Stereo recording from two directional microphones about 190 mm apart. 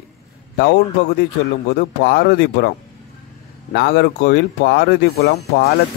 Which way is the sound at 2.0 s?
60° left (ahead or behind).